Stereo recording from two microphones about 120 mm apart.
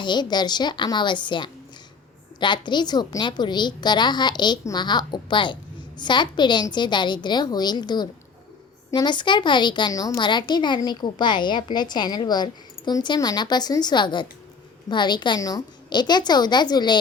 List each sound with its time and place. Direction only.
0.0 s a woman's voice: 40° left (ahead or behind)